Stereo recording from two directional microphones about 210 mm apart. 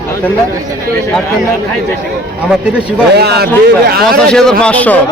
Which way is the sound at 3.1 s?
50° right (ahead or behind).